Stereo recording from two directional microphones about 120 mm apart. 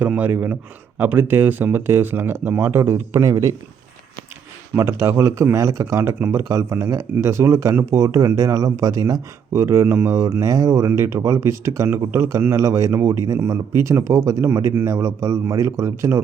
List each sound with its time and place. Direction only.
0.0 s speech: 15° right (ahead or behind)
4.7 s speech: 20° right (ahead or behind)